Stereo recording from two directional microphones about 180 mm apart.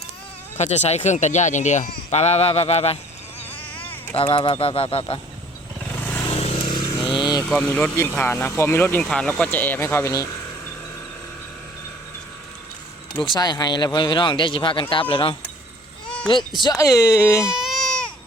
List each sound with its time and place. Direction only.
0.5 s speech: 40° left (ahead or behind)
4.1 s speech: 30° left (ahead or behind)
6.1 s vehicle: 15° left (ahead or behind)
6.3 s vehicle: 35° left (ahead or behind)
7.4 s speech: 5° left (ahead or behind)
13.1 s speech: 25° left (ahead or behind)
16.0 s a sound: 5° left (ahead or behind)
16.6 s speech: 20° left (ahead or behind)
17.4 s baby cry: 5° right (ahead or behind)